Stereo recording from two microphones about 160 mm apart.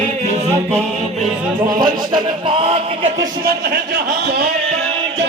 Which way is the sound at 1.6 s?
25° right (ahead or behind).